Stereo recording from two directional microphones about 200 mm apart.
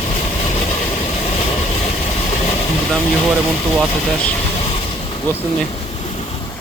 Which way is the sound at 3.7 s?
5° left (ahead or behind).